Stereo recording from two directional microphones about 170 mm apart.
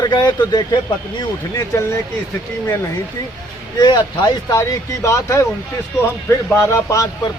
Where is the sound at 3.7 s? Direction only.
25° left (ahead or behind).